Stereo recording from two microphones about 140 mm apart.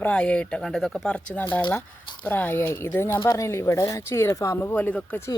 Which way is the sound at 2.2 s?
15° left (ahead or behind).